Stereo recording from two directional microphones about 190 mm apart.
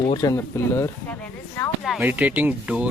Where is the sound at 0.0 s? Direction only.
20° left (ahead or behind).